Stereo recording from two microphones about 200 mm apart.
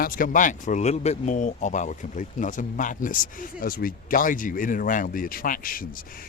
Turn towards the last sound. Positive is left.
turn(degrees=45)  # may be behind; listen again after turning